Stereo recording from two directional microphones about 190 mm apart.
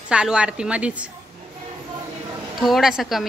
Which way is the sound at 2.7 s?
Centre (ahead or behind).